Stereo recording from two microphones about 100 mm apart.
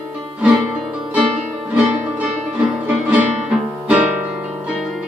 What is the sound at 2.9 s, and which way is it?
Music, 10° right (ahead or behind).